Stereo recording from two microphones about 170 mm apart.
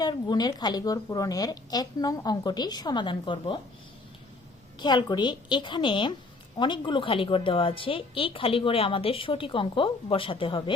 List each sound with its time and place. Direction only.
0.0 s speech: 25° left (ahead or behind)
4.8 s a woman's voice: 25° left (ahead or behind)